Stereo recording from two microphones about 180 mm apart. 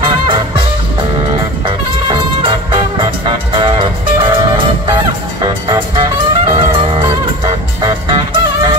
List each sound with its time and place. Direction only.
0.0 s music: 30° right (ahead or behind)
1.7 s music: 25° right (ahead or behind)
6.7 s music: 25° right (ahead or behind)